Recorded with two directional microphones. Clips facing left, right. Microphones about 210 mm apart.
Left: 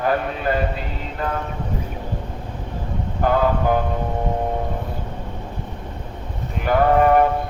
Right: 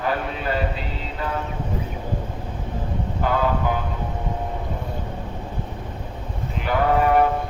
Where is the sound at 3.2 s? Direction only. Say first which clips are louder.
Left 4 dB; 50° left (ahead or behind).